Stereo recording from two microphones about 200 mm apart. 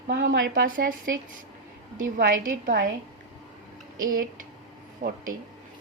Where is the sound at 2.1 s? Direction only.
45° right (ahead or behind).